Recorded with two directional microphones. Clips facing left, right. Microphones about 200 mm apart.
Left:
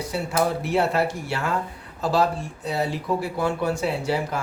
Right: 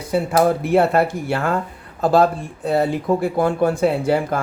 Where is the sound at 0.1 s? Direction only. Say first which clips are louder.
Right 8 dB; 55° right (ahead or behind).